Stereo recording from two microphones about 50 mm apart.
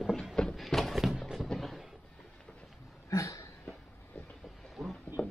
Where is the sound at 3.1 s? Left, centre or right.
Left.